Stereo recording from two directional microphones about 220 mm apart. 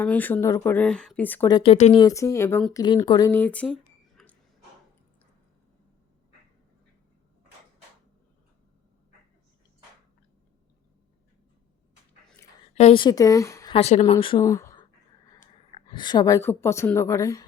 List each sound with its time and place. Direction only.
0.0 s speech: 10° left (ahead or behind)
2.8 s speech: 20° left (ahead or behind); by 4.4 s centre (ahead or behind)
12.7 s a woman's voice: 25° left (ahead or behind)
13.7 s a woman's voice: 30° left (ahead or behind); by 14.8 s 15° left (ahead or behind)
15.4 s a woman's voice: 25° left (ahead or behind)